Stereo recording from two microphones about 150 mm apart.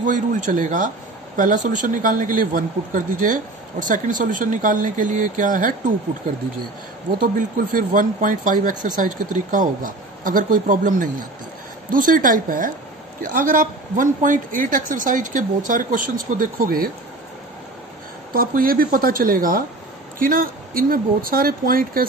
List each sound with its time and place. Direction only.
0.0 s speech: 55° right (ahead or behind)
7.2 s speech: 70° right (ahead or behind)
18.3 s speech: 75° right (ahead or behind)